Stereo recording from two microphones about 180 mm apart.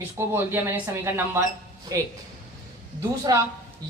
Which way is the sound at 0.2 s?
15° right (ahead or behind).